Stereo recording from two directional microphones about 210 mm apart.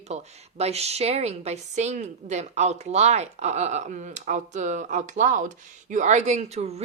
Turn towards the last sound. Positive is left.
turn(degrees=-30)  # may be behind; listen again after turning